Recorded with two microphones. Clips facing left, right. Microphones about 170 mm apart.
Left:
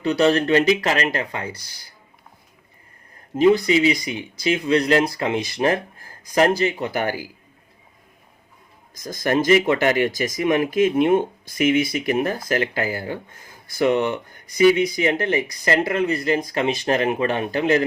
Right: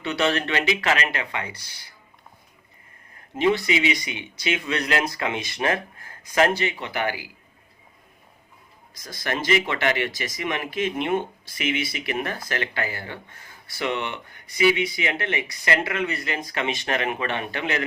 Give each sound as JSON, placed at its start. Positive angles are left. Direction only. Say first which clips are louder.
{"t": 0.0, "sound": "speech", "louder": "left 6 dB", "side_deg": 40}
{"t": 3.3, "sound": "speech", "louder": "left 6 dB", "side_deg": 40}
{"t": 9.0, "sound": "speech", "louder": "left 7 dB", "side_deg": 45}